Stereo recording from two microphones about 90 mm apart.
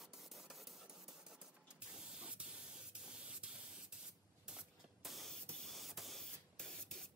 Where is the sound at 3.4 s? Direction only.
10° right (ahead or behind).